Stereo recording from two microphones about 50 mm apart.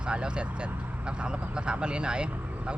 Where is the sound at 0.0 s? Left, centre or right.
Right.